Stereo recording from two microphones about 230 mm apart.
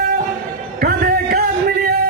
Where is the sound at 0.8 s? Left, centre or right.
Right.